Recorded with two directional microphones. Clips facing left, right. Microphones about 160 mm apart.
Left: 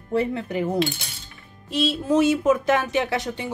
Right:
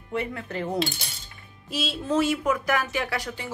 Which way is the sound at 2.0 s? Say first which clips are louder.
Left 4 dB; 20° left (ahead or behind).